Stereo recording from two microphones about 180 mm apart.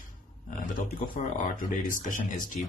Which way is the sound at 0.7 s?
50° left (ahead or behind).